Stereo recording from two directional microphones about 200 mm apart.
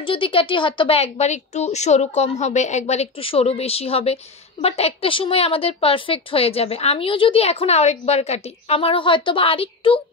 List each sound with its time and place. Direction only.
0.0 s speech: 25° left (ahead or behind)